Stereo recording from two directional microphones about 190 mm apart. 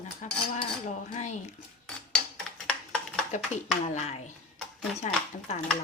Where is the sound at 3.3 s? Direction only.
35° left (ahead or behind).